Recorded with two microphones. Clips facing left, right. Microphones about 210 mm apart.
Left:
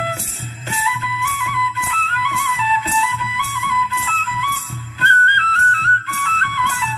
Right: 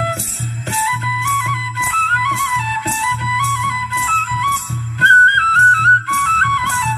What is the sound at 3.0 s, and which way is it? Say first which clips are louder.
Music: even; 65° right (ahead or behind).